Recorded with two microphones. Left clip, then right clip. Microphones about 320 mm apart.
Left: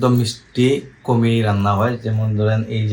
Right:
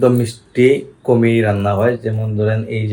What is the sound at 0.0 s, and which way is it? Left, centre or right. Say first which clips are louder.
Speech: right 4 dB; centre.